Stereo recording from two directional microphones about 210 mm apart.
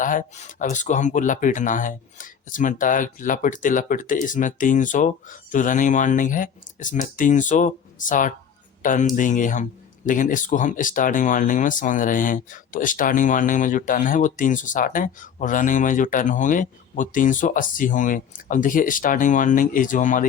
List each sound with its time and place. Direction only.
0.0 s speech: 40° left (ahead or behind)